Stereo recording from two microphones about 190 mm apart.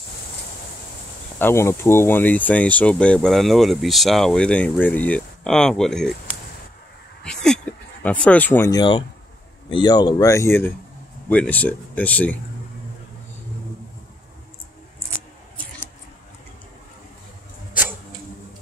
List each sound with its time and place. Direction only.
1.4 s speech: 15° left (ahead or behind)
7.2 s a sound: 5° left (ahead or behind); by 9.0 s 20° left (ahead or behind)
9.7 s speech: 25° left (ahead or behind)